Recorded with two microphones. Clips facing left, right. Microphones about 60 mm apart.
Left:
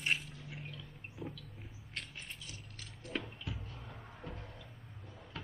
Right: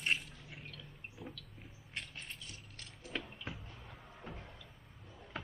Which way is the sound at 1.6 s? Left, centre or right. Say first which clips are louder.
Right 1 dB; centre.